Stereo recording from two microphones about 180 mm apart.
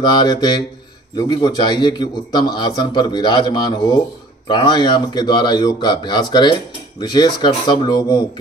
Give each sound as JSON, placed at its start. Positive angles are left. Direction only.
{"t": 0.0, "sound": "a man's voice", "side_deg": 25}